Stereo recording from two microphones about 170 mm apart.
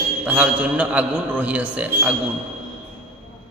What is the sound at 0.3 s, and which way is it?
A man's voice, 10° right (ahead or behind).